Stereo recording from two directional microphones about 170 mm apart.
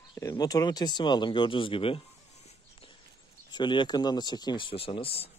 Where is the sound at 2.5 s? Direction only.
30° left (ahead or behind).